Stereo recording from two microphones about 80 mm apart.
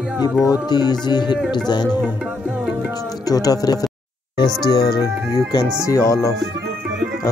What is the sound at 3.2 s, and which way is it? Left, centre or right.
Speech, left.